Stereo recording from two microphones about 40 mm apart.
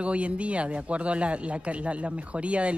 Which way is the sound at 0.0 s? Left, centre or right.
Right.